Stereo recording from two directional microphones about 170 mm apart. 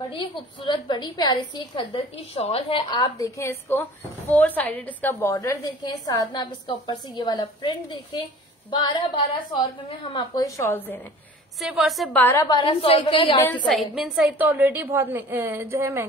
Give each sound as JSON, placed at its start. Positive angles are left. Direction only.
{"t": 0.1, "sound": "a woman's voice", "side_deg": 30}
{"t": 11.6, "sound": "a woman's voice", "side_deg": 0}
{"t": 12.2, "sound": "a woman's voice", "side_deg": 10}
{"t": 12.4, "sound": "a woman's voice", "side_deg": 30}
{"t": 13.7, "sound": "a woman's voice", "side_deg": 0}